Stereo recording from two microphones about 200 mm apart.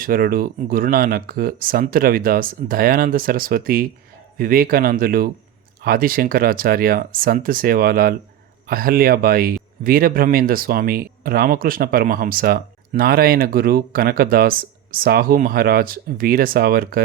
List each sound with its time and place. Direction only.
0.0 s speech: 45° right (ahead or behind)